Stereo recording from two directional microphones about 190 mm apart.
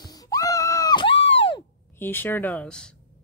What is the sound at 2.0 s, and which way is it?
Speech, 10° left (ahead or behind).